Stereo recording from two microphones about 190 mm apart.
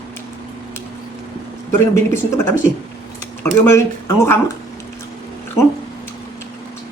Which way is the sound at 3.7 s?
15° left (ahead or behind).